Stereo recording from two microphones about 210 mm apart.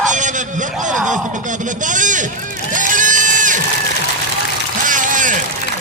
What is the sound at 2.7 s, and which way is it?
Crowd, 40° right (ahead or behind).